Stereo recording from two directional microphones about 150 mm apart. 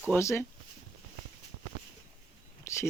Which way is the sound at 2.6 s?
20° left (ahead or behind).